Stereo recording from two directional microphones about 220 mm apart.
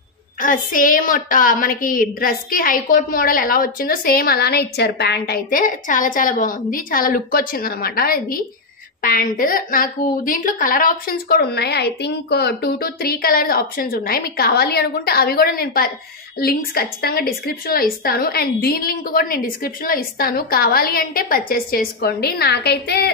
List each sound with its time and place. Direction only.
0.4 s a woman's voice: 35° left (ahead or behind)